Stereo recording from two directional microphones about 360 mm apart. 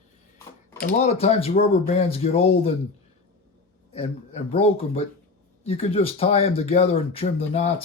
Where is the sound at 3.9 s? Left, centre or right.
Centre.